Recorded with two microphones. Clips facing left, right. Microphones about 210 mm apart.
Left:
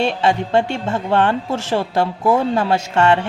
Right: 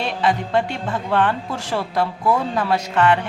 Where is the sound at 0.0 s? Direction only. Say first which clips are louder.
Left 4 dB; 25° left (ahead or behind).